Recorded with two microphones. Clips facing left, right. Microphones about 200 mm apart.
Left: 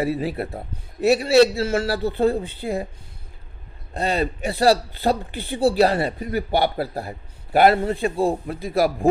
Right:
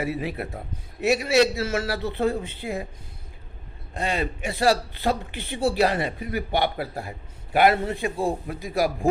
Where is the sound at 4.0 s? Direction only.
35° left (ahead or behind).